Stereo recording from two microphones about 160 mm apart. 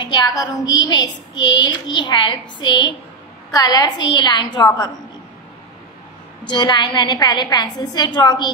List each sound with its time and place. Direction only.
0.0 s child singing: 25° left (ahead or behind)
6.4 s child singing: 30° left (ahead or behind)